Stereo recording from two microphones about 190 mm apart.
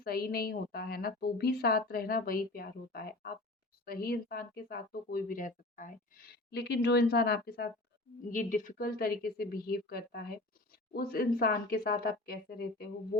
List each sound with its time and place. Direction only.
0.0 s a woman's voice: 50° left (ahead or behind)
8.3 s a woman's voice: 45° left (ahead or behind)